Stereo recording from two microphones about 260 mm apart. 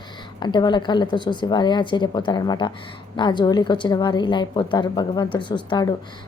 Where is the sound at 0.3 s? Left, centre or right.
Centre.